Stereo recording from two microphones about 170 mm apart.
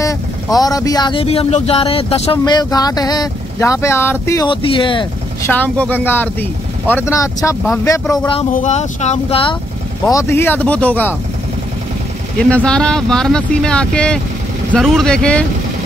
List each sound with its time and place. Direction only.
0.6 s speech: 20° left (ahead or behind)
2.3 s speech: 25° left (ahead or behind)
4.5 s speech: 30° left (ahead or behind)
5.4 s speech: 10° left (ahead or behind)
8.5 s speech: 45° left (ahead or behind)
10.0 s speech: 15° left (ahead or behind)
12.4 s speech: 5° left (ahead or behind)